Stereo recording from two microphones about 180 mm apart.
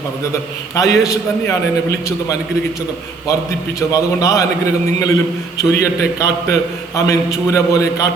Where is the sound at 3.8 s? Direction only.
15° left (ahead or behind).